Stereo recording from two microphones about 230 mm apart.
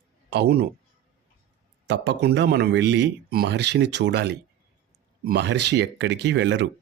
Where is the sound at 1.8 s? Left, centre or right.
Right.